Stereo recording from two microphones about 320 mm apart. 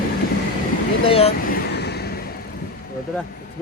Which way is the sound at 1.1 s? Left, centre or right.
Left.